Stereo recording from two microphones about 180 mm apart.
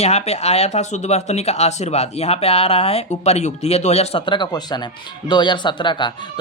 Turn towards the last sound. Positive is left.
turn(degrees=25)  # may be behind; listen again after turning